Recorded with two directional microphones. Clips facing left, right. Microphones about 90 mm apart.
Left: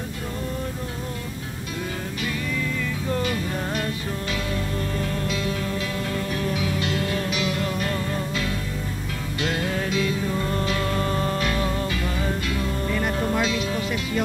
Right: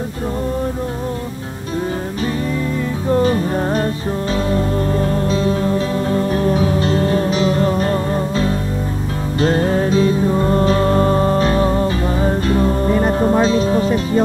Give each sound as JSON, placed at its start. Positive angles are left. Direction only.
{"t": 3.1, "sound": "music", "side_deg": -35}